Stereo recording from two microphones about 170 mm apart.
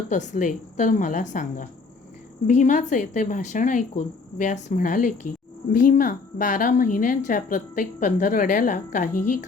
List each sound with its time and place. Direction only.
0.1 s a woman's voice: 45° left (ahead or behind)